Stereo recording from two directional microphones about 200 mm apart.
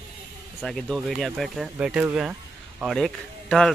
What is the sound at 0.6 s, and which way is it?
Speech, centre (ahead or behind).